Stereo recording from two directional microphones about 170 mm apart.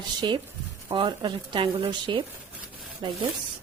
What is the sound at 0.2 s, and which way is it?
Speech, 25° right (ahead or behind).